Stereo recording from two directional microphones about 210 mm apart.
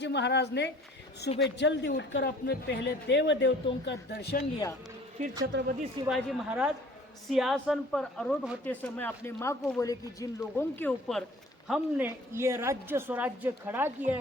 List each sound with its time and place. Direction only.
0.0 s speech: 55° left (ahead or behind)
5.5 s speech: 55° right (ahead or behind)
6.1 s speech: centre (ahead or behind)
11.7 s a woman's voice: 10° right (ahead or behind)